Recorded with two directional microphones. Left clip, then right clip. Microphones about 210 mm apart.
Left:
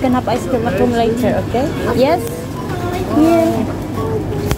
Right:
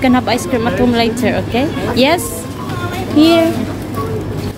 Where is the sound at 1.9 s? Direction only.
30° right (ahead or behind).